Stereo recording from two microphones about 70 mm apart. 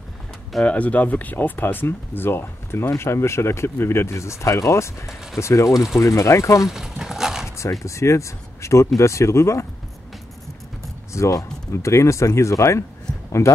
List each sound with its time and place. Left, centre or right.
0.7 s speech: left
6.7 s horse: centre
7.4 s a sound: left
7.8 s speech: left
11.1 s speech: left